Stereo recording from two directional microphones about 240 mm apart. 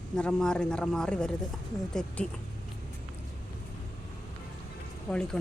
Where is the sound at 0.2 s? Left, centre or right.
Centre.